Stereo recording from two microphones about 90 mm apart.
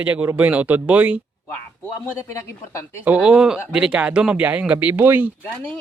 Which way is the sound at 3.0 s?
15° right (ahead or behind).